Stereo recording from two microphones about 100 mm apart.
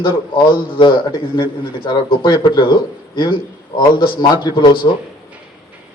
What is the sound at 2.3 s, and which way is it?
Speech, 50° left (ahead or behind).